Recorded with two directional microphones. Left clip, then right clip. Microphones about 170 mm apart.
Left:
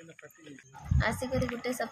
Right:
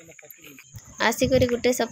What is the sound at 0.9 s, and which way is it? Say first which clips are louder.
Speech: right 11 dB; 50° right (ahead or behind).